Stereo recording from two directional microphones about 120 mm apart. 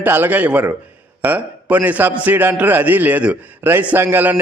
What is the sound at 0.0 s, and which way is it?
A man's voice, 15° right (ahead or behind).